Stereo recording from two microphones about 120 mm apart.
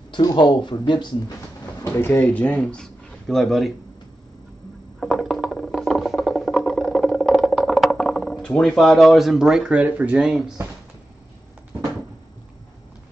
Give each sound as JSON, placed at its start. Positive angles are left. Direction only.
{"t": 0.1, "sound": "speech", "side_deg": 35}
{"t": 1.9, "sound": "speech", "side_deg": 20}
{"t": 5.0, "sound": "a sound", "side_deg": 0}